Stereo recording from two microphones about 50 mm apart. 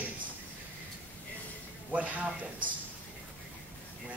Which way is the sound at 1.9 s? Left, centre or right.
Right.